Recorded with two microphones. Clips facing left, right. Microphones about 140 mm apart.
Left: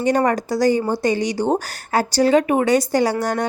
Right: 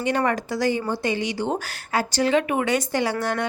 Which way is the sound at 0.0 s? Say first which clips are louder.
Left 5 dB; 40° left (ahead or behind).